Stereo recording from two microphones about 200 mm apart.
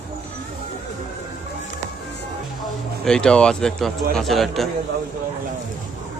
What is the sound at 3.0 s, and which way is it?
Speech, 5° left (ahead or behind).